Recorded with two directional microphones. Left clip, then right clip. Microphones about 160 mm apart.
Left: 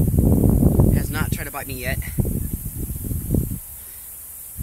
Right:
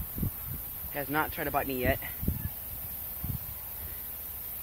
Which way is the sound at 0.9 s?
30° left (ahead or behind).